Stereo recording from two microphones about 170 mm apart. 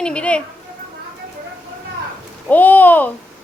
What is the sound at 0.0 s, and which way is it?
Speech, 5° left (ahead or behind).